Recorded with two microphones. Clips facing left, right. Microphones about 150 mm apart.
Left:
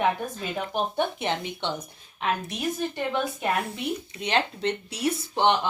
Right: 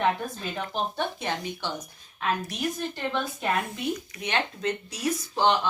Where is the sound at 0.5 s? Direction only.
20° left (ahead or behind).